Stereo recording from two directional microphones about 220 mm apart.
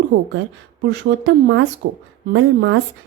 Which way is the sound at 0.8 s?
55° right (ahead or behind).